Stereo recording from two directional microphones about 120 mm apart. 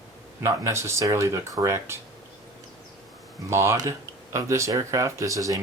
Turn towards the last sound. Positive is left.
turn(degrees=-25)  # may be behind; listen again after turning